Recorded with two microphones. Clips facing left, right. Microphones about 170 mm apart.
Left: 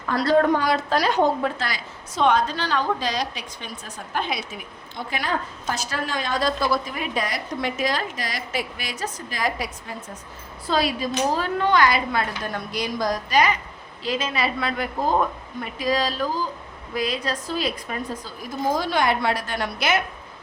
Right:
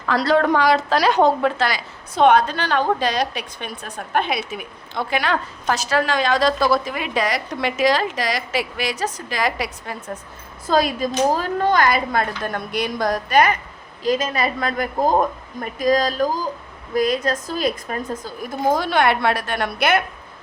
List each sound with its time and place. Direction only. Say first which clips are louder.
0.0 s a woman's voice: right 1 dB; 90° right; by 10.0 s 75° right (ahead or behind)
10.7 s a woman's voice: right 4 dB; 45° right (ahead or behind)